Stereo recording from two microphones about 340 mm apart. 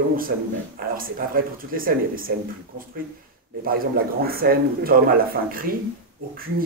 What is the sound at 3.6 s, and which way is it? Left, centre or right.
Speech, right.